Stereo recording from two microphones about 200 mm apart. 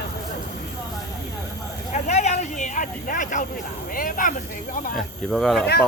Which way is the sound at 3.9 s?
45° left (ahead or behind).